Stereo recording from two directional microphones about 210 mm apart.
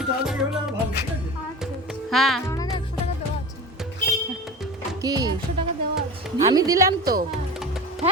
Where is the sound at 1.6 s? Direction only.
Centre (ahead or behind).